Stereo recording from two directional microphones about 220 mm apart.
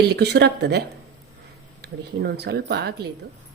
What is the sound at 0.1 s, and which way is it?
Speech, 45° right (ahead or behind).